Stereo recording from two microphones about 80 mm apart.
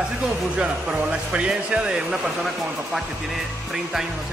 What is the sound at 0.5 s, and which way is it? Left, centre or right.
Speech, centre.